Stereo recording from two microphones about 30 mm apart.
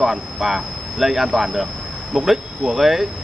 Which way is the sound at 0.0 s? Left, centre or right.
Centre.